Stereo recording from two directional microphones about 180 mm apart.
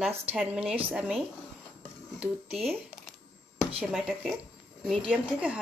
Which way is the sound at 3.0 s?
5° right (ahead or behind).